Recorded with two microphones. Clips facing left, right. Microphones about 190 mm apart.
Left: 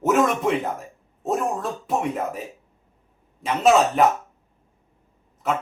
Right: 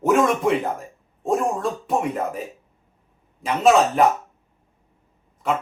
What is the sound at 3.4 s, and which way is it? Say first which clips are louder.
Speech: right 1 dB; centre (ahead or behind).